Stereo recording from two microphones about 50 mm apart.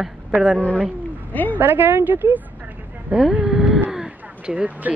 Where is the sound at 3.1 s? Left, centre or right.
Centre.